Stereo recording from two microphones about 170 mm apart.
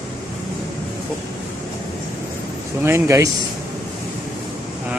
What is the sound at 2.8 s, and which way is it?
Speech, 15° right (ahead or behind).